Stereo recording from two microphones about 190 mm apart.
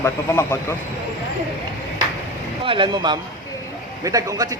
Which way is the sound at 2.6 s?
25° right (ahead or behind).